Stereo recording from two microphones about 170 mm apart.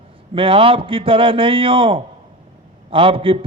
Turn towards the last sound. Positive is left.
turn(degrees=-30)  # may be behind; listen again after turning